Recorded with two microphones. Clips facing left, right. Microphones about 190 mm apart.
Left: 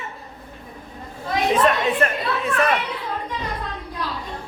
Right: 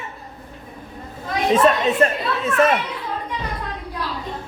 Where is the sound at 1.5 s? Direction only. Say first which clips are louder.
Right 4 dB; 25° right (ahead or behind).